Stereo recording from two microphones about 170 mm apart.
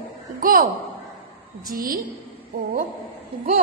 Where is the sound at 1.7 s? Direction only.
50° right (ahead or behind).